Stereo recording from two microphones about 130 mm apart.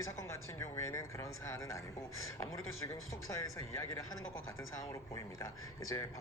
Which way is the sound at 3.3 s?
25° left (ahead or behind).